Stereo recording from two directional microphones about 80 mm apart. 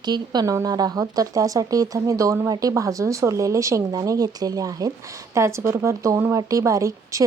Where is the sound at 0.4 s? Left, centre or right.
Right.